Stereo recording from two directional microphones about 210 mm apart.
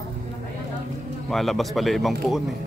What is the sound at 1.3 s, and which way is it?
Speech, centre (ahead or behind).